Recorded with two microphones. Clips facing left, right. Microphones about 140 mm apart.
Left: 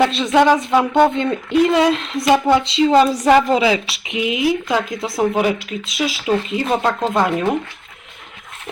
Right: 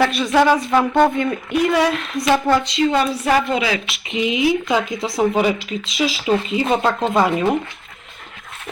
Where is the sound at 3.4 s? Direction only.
35° left (ahead or behind).